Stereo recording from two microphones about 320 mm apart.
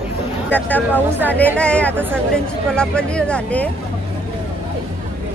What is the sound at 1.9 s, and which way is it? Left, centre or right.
Speech, centre.